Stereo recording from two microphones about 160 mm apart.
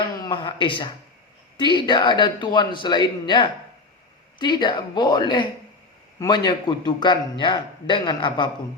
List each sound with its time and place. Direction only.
0.2 s a man's voice: 30° left (ahead or behind)